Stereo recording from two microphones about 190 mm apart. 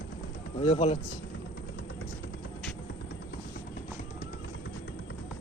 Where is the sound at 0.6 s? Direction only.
30° left (ahead or behind).